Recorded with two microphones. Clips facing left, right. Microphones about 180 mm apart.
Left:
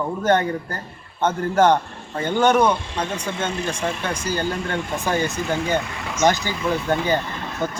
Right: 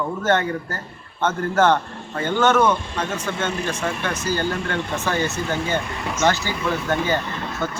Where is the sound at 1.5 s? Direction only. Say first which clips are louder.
Left 1 dB; 15° left (ahead or behind).